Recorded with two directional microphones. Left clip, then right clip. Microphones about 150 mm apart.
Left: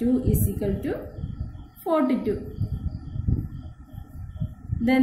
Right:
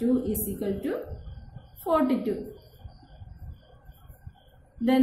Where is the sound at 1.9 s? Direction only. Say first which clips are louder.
Left 2 dB; 20° left (ahead or behind).